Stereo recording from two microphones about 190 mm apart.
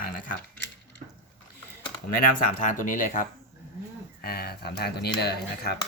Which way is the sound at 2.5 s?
45° left (ahead or behind).